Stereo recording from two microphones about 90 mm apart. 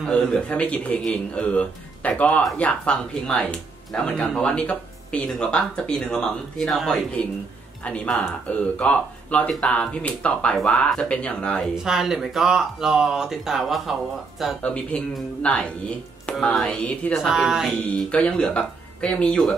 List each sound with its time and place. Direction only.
0.1 s speech: 10° left (ahead or behind)
7.8 s speech: 15° left (ahead or behind)
11.7 s speech: 5° right (ahead or behind)
14.6 s speech: 15° left (ahead or behind); by 18.0 s 5° right (ahead or behind)
18.1 s speech: 15° left (ahead or behind)